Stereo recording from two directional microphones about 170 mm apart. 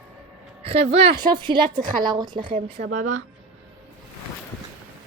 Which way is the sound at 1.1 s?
25° right (ahead or behind).